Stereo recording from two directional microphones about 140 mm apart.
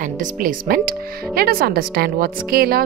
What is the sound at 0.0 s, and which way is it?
Speech, 70° right (ahead or behind).